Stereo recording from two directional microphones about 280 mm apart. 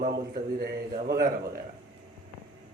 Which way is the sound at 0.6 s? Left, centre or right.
Right.